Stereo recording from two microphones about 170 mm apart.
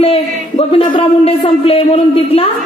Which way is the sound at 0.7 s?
30° left (ahead or behind).